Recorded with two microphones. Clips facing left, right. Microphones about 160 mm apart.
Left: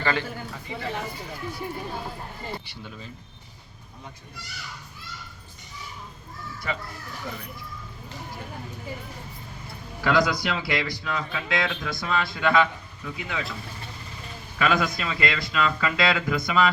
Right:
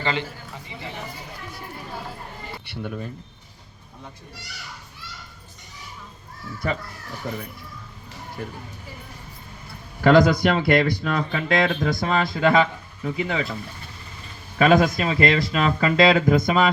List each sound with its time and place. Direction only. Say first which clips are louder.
0.0 s a man's voice: even; 20° right (ahead or behind)
2.6 s speech: right 9 dB; 55° right (ahead or behind)
10.0 s speech: right 7 dB; 50° right (ahead or behind)
14.6 s speech: right 7 dB; 45° right (ahead or behind)